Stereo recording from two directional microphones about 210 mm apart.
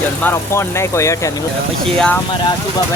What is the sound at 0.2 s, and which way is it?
Speech, 10° left (ahead or behind).